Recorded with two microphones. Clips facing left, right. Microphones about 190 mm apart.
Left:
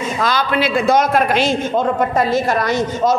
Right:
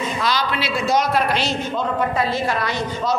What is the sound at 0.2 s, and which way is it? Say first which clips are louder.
A woman's voice: left 7 dB; 50° left (ahead or behind).